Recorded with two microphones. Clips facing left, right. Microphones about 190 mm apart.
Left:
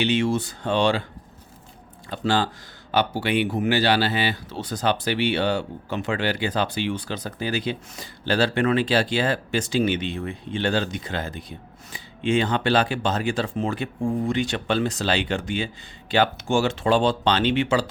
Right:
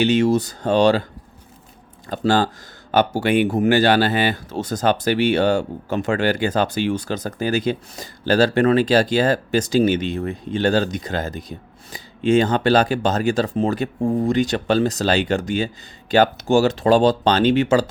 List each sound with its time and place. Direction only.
0.0 s speech: 40° right (ahead or behind)
2.0 s speech: 45° right (ahead or behind)